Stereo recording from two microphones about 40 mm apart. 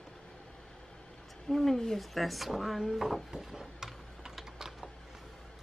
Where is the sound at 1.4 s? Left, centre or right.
Centre.